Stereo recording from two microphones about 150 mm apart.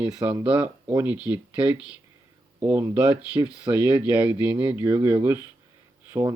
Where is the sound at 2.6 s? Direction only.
15° right (ahead or behind).